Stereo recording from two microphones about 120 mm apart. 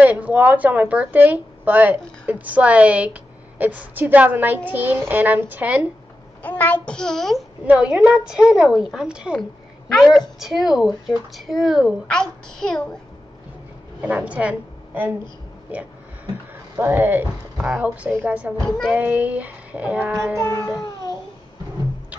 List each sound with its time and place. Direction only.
0.0 s a woman's voice: 10° right (ahead or behind)
6.4 s a child's voice: 15° left (ahead or behind)
7.6 s a woman's voice: 10° right (ahead or behind); by 12.8 s 5° left (ahead or behind)
14.0 s a woman's voice: 10° right (ahead or behind)
16.7 s a woman's voice: 15° right (ahead or behind)
20.4 s speech: 30° left (ahead or behind)